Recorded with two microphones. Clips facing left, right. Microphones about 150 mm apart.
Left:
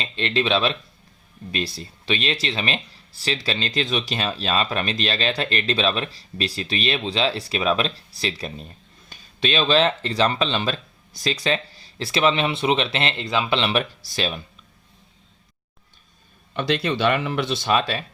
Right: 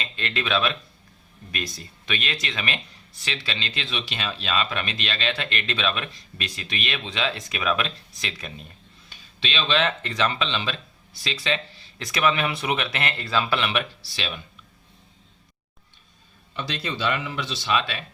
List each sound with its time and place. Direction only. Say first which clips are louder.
0.0 s speech: left 6 dB; 30° left (ahead or behind)
13.7 s speech: left 4 dB; 40° left (ahead or behind)
16.6 s speech: left 7 dB; 65° left (ahead or behind); by 18.0 s 40° left (ahead or behind)